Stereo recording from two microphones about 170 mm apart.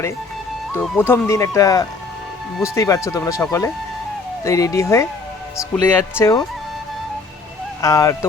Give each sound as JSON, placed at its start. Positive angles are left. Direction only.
{"t": 0.8, "sound": "speech", "side_deg": 10}
{"t": 7.8, "sound": "speech", "side_deg": 20}